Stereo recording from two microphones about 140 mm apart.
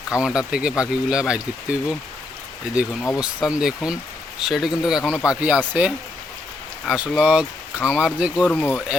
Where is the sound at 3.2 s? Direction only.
5° right (ahead or behind).